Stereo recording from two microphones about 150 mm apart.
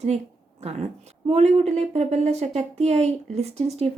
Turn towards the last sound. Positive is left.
turn(degrees=-45)  # may be behind; listen again after turning